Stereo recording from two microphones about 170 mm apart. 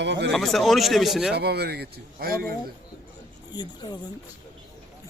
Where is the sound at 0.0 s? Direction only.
90° right.